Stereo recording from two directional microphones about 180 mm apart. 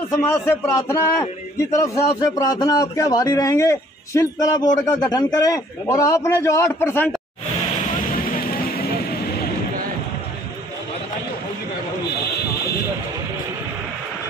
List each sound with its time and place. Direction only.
0.1 s a man's voice: 15° left (ahead or behind)
8.4 s music: 55° left (ahead or behind)